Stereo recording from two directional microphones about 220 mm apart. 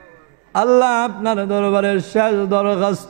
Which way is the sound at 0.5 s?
15° right (ahead or behind).